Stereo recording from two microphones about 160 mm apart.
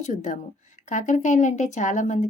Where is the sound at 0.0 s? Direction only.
50° left (ahead or behind).